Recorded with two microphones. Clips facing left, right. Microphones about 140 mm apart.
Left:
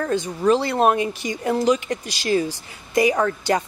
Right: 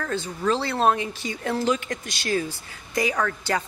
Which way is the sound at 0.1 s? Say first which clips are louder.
Left 6 dB; 15° left (ahead or behind).